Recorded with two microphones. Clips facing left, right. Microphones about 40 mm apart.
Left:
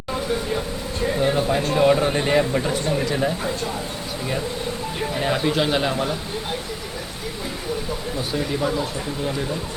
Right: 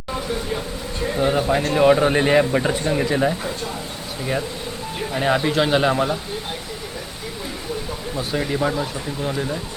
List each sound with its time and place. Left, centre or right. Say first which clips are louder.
1.0 s a sound: even; centre
1.3 s speech: right 1 dB; centre
5.1 s speech: right 3 dB; centre
8.4 s speech: right 2 dB; centre